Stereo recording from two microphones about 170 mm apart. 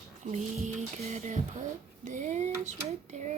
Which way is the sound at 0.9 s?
40° right (ahead or behind).